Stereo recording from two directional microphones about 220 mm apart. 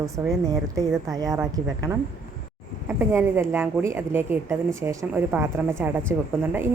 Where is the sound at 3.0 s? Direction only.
10° right (ahead or behind).